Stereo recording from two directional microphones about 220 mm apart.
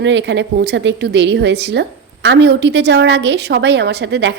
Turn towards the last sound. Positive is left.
turn(degrees=-50)  # may be behind; listen again after turning